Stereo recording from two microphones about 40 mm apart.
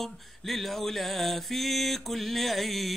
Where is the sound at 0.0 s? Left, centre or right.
Centre.